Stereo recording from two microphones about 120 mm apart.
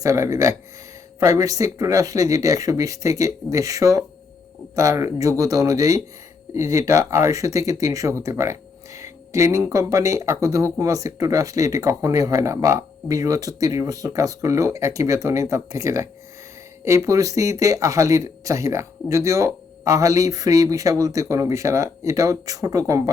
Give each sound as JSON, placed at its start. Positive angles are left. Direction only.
{"t": 0.0, "sound": "speech", "side_deg": -25}